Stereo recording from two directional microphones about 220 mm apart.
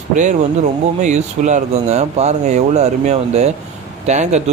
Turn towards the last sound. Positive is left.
turn(degrees=-30)  # may be behind; listen again after turning